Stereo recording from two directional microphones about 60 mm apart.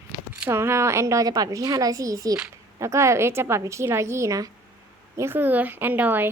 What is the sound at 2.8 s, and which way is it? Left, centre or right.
A woman's voice, right.